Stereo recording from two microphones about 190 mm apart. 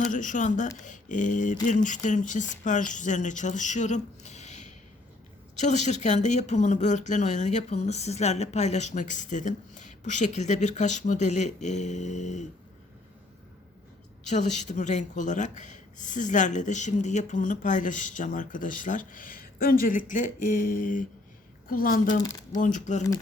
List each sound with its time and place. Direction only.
0.1 s a woman's voice: 45° left (ahead or behind)
14.3 s a woman's voice: 40° left (ahead or behind)